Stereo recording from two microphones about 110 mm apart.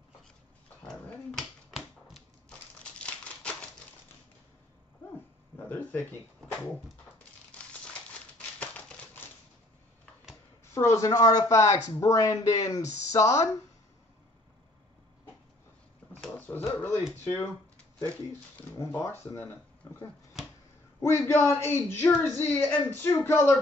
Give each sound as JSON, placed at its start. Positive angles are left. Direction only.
{"t": 0.8, "sound": "dog", "side_deg": 5}
{"t": 2.8, "sound": "crumpling", "side_deg": 10}
{"t": 5.7, "sound": "speech", "side_deg": 15}
{"t": 7.5, "sound": "crumpling", "side_deg": 10}
{"t": 10.7, "sound": "speech", "side_deg": 25}
{"t": 16.3, "sound": "a sound", "side_deg": 15}
{"t": 17.2, "sound": "speech", "side_deg": 20}
{"t": 18.8, "sound": "speech", "side_deg": 25}
{"t": 20.4, "sound": "a sound", "side_deg": -5}
{"t": 21.0, "sound": "speech", "side_deg": 25}